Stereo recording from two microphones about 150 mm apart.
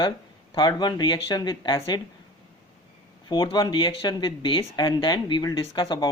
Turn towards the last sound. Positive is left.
turn(degrees=30)  # may be behind; listen again after turning